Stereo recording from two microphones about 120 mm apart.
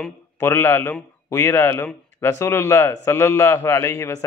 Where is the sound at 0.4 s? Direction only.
20° left (ahead or behind).